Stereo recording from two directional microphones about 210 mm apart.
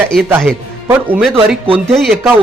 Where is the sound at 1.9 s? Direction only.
Centre (ahead or behind).